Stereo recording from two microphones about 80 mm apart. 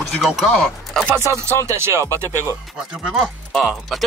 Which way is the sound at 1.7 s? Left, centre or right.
Right.